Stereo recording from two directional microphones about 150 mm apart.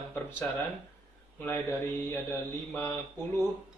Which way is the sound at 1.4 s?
15° left (ahead or behind).